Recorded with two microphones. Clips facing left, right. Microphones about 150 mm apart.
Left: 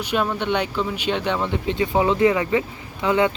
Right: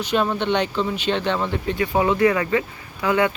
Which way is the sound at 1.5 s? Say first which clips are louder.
Left 1 dB; 20° left (ahead or behind).